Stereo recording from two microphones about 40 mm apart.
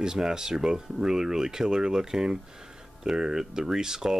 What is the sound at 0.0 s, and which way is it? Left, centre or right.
Speech, centre.